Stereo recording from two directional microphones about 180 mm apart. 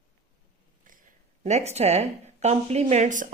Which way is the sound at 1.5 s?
40° right (ahead or behind).